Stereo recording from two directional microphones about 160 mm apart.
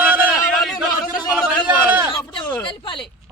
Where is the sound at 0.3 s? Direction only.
Centre (ahead or behind).